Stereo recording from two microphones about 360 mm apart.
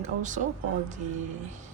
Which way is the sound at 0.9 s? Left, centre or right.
Centre.